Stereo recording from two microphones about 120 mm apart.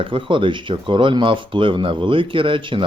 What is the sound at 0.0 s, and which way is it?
Speech, 45° right (ahead or behind).